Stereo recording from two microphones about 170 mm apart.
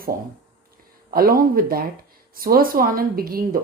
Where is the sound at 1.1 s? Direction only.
60° right (ahead or behind).